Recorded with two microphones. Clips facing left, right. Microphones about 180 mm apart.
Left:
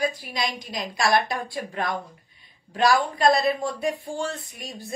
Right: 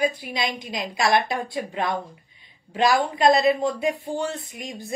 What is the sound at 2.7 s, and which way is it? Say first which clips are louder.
A woman's voice: even; 20° right (ahead or behind).